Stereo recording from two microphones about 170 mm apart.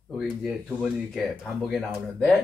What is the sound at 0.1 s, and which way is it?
Speech, centre (ahead or behind).